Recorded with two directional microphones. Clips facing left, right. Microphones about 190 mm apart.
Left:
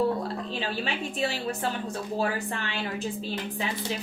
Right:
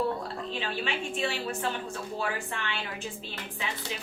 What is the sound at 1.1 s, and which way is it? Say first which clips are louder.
Speech: left 2 dB; 40° left (ahead or behind).